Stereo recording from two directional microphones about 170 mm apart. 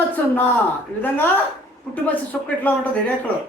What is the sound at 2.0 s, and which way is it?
Speech, 10° left (ahead or behind).